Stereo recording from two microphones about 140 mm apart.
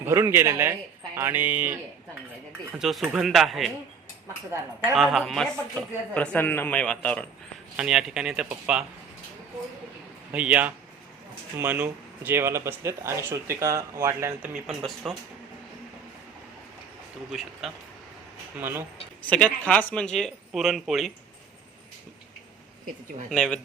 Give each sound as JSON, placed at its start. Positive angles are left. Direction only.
{"t": 0.0, "sound": "speech", "side_deg": -15}
{"t": 4.9, "sound": "speech", "side_deg": 0}
{"t": 7.8, "sound": "speech", "side_deg": -5}
{"t": 10.3, "sound": "speech", "side_deg": -10}
{"t": 14.7, "sound": "speech", "side_deg": 0}
{"t": 17.6, "sound": "speech", "side_deg": 0}
{"t": 18.5, "sound": "speech", "side_deg": -15}
{"t": 19.3, "sound": "speech", "side_deg": 10}
{"t": 23.3, "sound": "speech", "side_deg": 5}